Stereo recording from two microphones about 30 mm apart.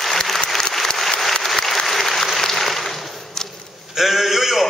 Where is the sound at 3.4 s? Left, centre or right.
Centre.